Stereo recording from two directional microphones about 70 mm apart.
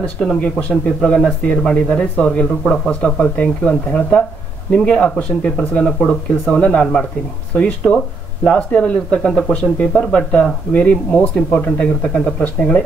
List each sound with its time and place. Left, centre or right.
0.0 s speech: centre